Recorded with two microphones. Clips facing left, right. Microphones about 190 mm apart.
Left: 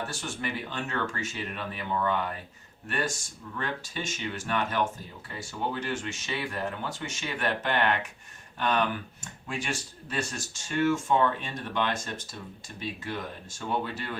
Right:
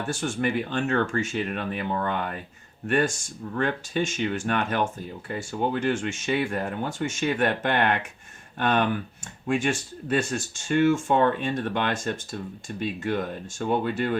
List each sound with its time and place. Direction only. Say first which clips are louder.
0.0 s speech: right 8 dB; 50° right (ahead or behind)